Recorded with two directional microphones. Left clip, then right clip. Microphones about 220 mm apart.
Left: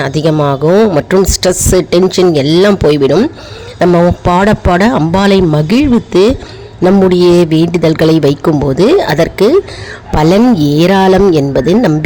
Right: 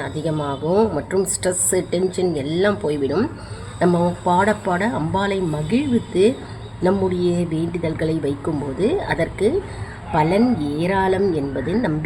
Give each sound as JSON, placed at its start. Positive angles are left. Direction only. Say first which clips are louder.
{"t": 0.0, "sound": "speech", "louder": "left 13 dB", "side_deg": 45}
{"t": 4.3, "sound": "speech", "louder": "left 5 dB", "side_deg": 45}